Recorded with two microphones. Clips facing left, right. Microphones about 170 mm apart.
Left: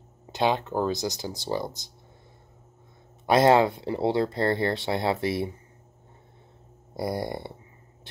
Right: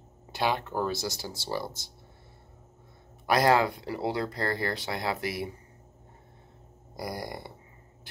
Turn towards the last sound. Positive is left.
turn(degrees=25)  # may be behind; listen again after turning